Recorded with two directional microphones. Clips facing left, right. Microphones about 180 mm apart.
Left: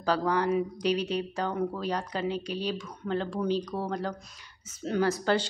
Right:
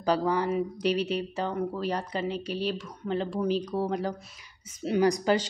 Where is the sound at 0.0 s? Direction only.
10° right (ahead or behind).